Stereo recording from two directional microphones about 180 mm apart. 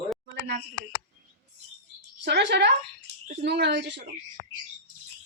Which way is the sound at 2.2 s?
75° right (ahead or behind).